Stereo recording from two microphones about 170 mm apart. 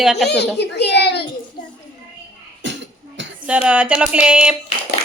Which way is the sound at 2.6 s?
90° right.